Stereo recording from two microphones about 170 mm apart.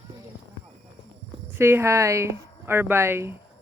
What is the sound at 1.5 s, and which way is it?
Speech, 15° right (ahead or behind).